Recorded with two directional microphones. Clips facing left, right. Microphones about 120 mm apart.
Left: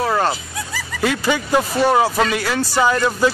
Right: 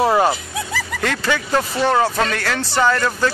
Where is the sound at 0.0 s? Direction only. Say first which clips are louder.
Right 3 dB; 15° right (ahead or behind).